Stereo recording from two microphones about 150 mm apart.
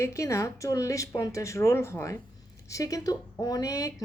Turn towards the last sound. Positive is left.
turn(degrees=20)  # may be behind; listen again after turning